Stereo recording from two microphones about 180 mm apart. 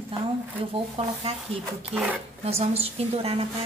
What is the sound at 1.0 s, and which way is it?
Speech, 30° right (ahead or behind).